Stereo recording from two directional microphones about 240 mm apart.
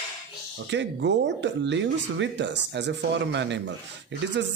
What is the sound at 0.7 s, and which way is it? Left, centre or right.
Speech, right.